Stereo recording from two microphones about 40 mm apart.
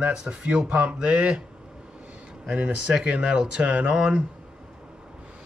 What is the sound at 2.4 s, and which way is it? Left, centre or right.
Speech, right.